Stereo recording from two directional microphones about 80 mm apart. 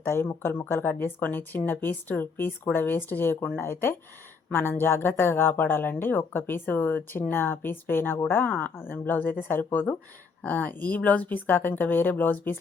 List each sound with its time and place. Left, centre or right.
0.1 s speech: left